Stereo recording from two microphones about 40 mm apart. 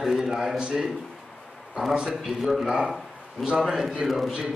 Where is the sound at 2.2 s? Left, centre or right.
Centre.